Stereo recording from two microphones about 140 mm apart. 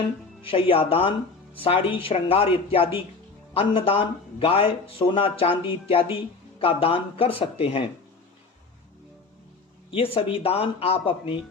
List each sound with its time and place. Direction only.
0.4 s speech: 40° left (ahead or behind)
9.9 s speech: 40° left (ahead or behind)